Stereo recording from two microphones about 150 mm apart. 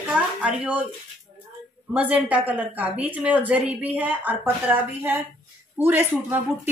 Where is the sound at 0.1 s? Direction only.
10° right (ahead or behind).